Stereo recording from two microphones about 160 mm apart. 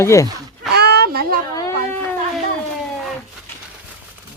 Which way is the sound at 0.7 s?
90° right.